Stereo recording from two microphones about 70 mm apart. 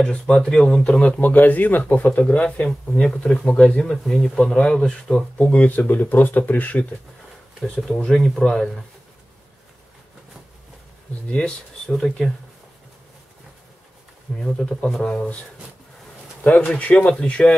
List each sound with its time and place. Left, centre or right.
0.0 s speech: centre
3.9 s speech: centre
5.4 s speech: left
7.6 s speech: centre
11.2 s speech: centre
14.4 s speech: centre
16.4 s speech: centre